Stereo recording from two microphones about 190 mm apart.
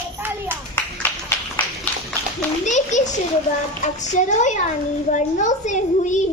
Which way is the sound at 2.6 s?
40° left (ahead or behind).